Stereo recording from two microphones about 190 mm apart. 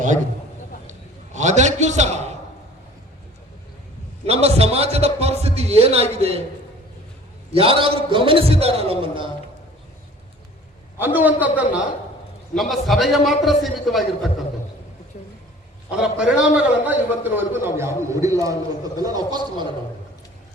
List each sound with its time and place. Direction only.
0.9 s a sound: 40° right (ahead or behind)
4.3 s a man's voice: 35° right (ahead or behind)
7.5 s a man's voice: 30° right (ahead or behind)
11.0 s a man's voice: 10° right (ahead or behind)
15.9 s a man's voice: 5° right (ahead or behind); by 19.6 s 20° right (ahead or behind)